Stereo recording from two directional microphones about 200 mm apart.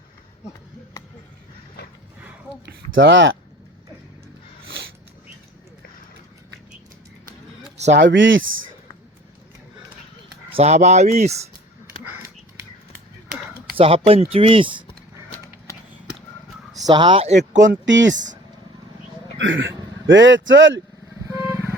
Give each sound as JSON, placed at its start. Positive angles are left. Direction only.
{"t": 2.6, "sound": "speech", "side_deg": -65}
{"t": 7.9, "sound": "speech", "side_deg": -60}
{"t": 10.5, "sound": "speech", "side_deg": -35}
{"t": 13.7, "sound": "speech", "side_deg": -30}
{"t": 16.8, "sound": "speech", "side_deg": -25}
{"t": 17.6, "sound": "speech", "side_deg": -65}
{"t": 19.4, "sound": "a man's voice", "side_deg": -70}
{"t": 21.2, "sound": "vehicle", "side_deg": -15}